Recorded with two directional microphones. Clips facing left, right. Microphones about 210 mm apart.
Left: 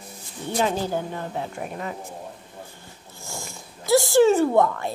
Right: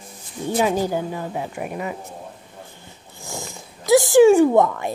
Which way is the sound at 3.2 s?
15° right (ahead or behind).